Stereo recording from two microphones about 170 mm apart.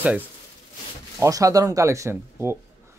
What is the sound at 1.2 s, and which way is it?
Speech, 20° right (ahead or behind).